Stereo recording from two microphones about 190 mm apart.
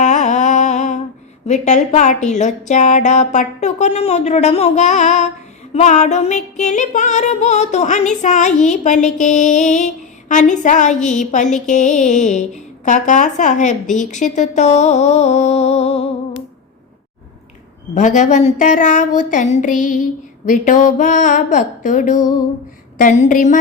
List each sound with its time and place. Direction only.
0.0 s humming: 40° left (ahead or behind)
1.5 s music: 40° left (ahead or behind)
17.9 s music: 40° left (ahead or behind)
20.4 s speech: 45° left (ahead or behind)